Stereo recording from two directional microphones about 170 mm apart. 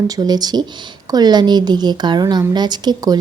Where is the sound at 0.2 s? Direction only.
25° right (ahead or behind).